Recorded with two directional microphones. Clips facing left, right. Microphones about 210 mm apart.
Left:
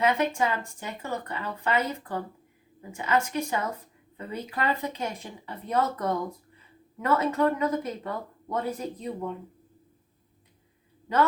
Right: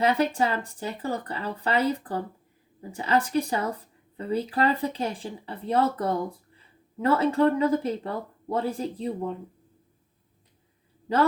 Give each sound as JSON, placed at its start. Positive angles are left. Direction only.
{"t": 0.0, "sound": "speech", "side_deg": -35}